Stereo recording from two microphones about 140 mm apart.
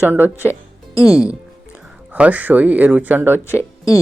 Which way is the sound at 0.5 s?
15° left (ahead or behind).